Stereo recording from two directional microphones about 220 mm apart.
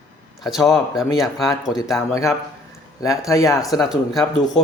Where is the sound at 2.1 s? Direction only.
15° left (ahead or behind).